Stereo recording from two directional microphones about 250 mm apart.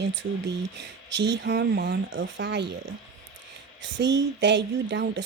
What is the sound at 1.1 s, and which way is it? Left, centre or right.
Speech, right.